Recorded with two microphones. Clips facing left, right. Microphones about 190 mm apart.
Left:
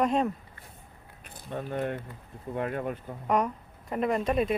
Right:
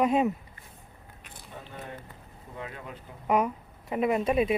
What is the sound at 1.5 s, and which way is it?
Speech, 65° left (ahead or behind).